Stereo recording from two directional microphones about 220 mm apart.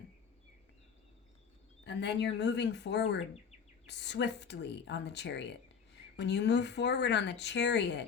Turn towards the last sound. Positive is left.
turn(degrees=50)  # may be behind; listen again after turning